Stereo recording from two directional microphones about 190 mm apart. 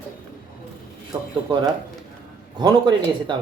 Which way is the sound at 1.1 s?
15° right (ahead or behind).